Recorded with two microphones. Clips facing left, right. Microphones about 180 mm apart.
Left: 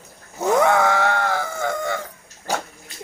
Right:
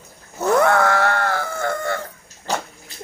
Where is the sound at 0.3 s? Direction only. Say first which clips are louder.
Right 1 dB; 15° left (ahead or behind).